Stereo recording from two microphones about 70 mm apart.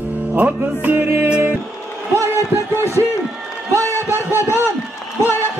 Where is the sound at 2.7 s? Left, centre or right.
Left.